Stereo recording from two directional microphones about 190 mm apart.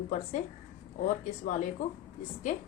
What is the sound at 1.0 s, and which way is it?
Speech, 40° left (ahead or behind).